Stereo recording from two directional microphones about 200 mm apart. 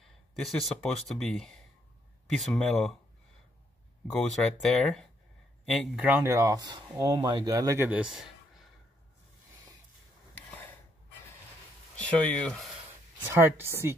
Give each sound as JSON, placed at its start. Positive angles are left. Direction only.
{"t": 0.4, "sound": "speech", "side_deg": 0}
{"t": 4.1, "sound": "speech", "side_deg": 0}
{"t": 10.3, "sound": "a sound", "side_deg": 10}
{"t": 12.0, "sound": "speech", "side_deg": 5}
{"t": 13.3, "sound": "speech", "side_deg": -10}